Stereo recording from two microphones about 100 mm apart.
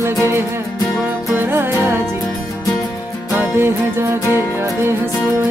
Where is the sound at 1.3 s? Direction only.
20° right (ahead or behind).